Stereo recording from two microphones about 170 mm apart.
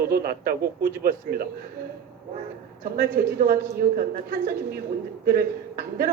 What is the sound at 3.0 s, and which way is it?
Speech, 60° right (ahead or behind).